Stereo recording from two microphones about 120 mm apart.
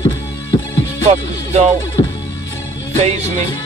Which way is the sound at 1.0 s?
70° right (ahead or behind).